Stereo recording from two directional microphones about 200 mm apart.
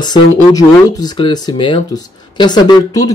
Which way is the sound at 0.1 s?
20° left (ahead or behind).